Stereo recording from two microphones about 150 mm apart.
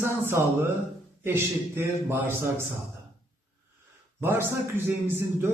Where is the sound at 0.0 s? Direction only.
15° right (ahead or behind).